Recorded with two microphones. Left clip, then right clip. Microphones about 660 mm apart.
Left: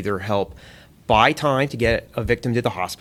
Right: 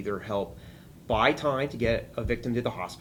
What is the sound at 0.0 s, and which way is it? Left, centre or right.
Speech, left.